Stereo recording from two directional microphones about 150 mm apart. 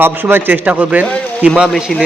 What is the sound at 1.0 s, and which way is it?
Speech, 5° left (ahead or behind).